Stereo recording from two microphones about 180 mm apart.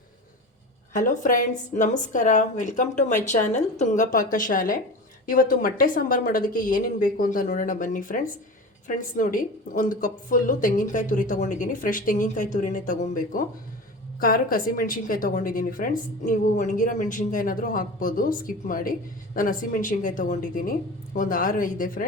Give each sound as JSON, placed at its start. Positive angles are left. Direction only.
{"t": 0.9, "sound": "a woman's voice", "side_deg": 45}